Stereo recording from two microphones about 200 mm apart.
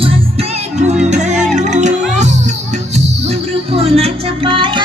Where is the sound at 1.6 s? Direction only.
35° right (ahead or behind).